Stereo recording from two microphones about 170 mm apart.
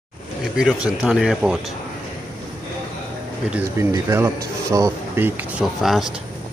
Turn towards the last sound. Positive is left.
turn(degrees=0)  # may be behind; listen again after turning